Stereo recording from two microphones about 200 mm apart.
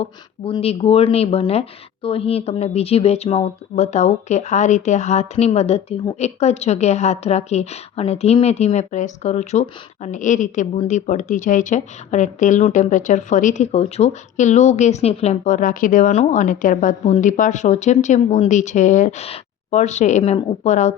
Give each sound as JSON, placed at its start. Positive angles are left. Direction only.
{"t": 0.0, "sound": "speech", "side_deg": 30}